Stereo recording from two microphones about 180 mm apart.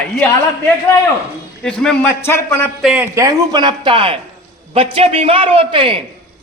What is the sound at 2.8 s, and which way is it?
A man's voice, 10° right (ahead or behind).